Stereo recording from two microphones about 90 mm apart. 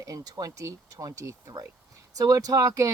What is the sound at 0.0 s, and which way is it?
Speech, 40° right (ahead or behind).